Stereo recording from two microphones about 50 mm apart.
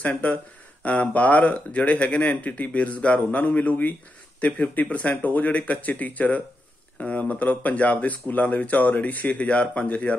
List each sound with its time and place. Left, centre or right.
1.1 s speech: left